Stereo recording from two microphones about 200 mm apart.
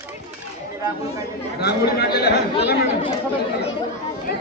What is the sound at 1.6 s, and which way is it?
Speech, 50° left (ahead or behind).